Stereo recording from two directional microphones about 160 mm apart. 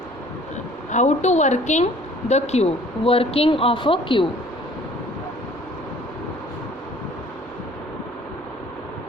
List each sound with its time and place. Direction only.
0.9 s a woman's voice: 45° left (ahead or behind)